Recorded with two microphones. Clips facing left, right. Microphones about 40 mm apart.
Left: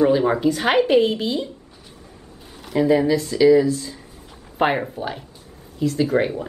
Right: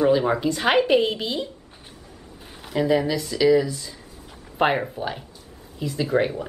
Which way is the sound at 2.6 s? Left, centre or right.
Centre.